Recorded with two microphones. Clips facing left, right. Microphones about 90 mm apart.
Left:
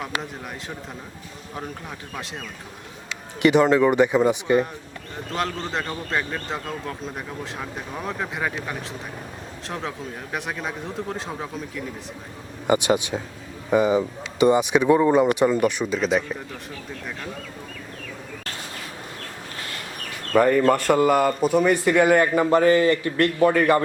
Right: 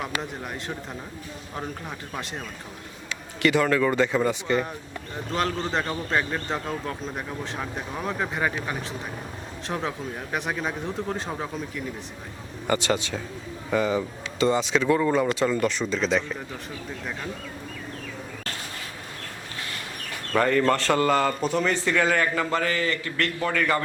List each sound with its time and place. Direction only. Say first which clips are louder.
3.4 s a man's voice: left 5 dB; 20° left (ahead or behind)
5.3 s speech: right 1 dB; centre (ahead or behind)
12.6 s a man's voice: left 5 dB; 15° left (ahead or behind)
20.3 s a man's voice: left 4 dB; 5° left (ahead or behind); by 23.8 s 25° left (ahead or behind)